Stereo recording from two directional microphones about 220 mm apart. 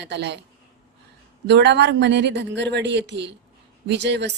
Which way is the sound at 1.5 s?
50° right (ahead or behind).